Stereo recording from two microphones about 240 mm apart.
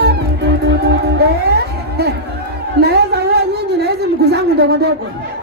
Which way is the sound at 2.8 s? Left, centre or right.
Right.